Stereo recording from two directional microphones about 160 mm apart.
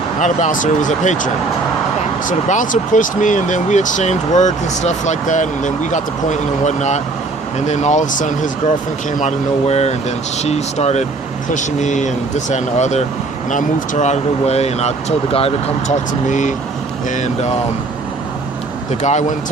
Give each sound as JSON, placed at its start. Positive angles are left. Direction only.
{"t": 0.2, "sound": "speech", "side_deg": 50}
{"t": 18.9, "sound": "speech", "side_deg": 45}